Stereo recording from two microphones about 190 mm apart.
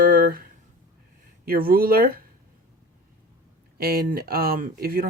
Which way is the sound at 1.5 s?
50° right (ahead or behind).